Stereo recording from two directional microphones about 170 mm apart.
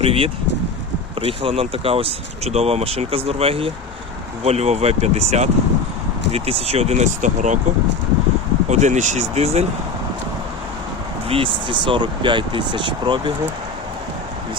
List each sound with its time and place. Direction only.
0.0 s speech: 35° right (ahead or behind)
8.7 s speech: 45° right (ahead or behind)
11.3 s speech: 30° right (ahead or behind)